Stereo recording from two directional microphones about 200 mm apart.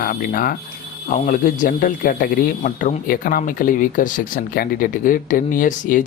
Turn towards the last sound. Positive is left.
turn(degrees=40)  # may be behind; listen again after turning